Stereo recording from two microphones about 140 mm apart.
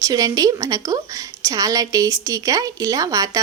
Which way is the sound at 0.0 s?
25° right (ahead or behind).